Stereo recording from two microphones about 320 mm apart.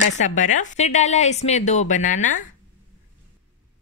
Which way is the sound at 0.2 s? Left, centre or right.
Left.